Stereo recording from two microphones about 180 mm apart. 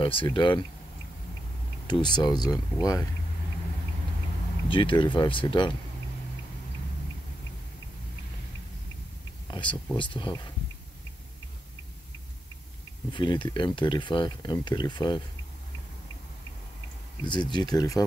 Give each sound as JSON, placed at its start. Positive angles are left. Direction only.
{"t": 0.0, "sound": "speech", "side_deg": 30}
{"t": 1.9, "sound": "speech", "side_deg": 25}
{"t": 4.6, "sound": "speech", "side_deg": 30}
{"t": 9.5, "sound": "speech", "side_deg": 25}
{"t": 13.1, "sound": "speech", "side_deg": 25}
{"t": 17.2, "sound": "speech", "side_deg": 25}